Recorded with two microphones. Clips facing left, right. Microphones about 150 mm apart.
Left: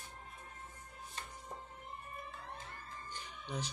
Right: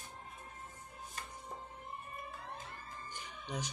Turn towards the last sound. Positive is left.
turn(degrees=-15)  # may be behind; listen again after turning